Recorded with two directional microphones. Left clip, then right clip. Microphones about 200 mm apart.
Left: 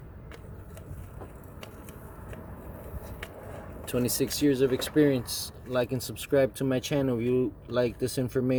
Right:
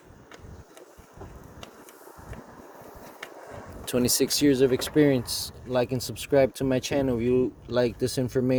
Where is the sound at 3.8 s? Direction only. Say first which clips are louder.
Right 4 dB; 45° right (ahead or behind).